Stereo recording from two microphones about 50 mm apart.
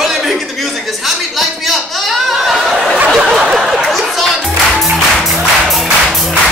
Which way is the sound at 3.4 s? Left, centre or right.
Centre.